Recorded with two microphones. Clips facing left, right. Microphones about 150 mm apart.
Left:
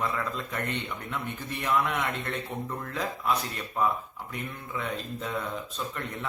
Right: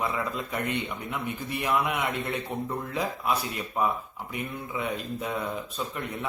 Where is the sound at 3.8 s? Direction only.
10° right (ahead or behind).